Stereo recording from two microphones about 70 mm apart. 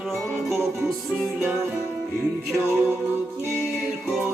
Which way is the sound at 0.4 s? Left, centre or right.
Centre.